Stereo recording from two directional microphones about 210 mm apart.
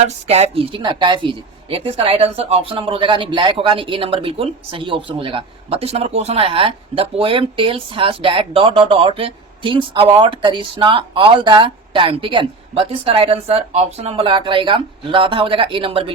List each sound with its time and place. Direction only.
0.0 s speech: 30° right (ahead or behind)